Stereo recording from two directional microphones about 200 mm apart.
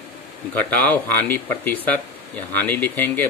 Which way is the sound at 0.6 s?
10° left (ahead or behind).